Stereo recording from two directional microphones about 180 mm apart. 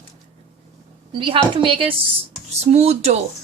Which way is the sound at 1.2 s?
25° right (ahead or behind).